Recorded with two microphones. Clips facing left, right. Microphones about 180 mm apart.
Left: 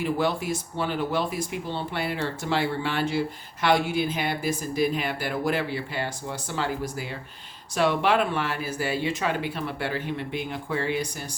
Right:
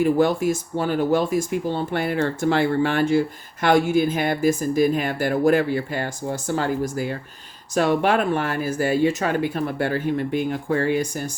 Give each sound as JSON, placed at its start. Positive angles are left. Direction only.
{"t": 0.0, "sound": "speech", "side_deg": -45}